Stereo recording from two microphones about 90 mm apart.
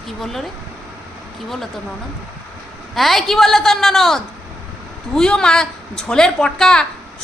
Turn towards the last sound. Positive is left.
turn(degrees=10)  # may be behind; listen again after turning